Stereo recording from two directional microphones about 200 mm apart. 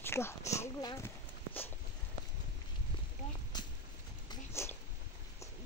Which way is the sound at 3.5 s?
20° left (ahead or behind).